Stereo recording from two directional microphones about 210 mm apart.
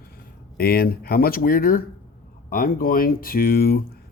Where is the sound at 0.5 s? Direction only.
45° left (ahead or behind).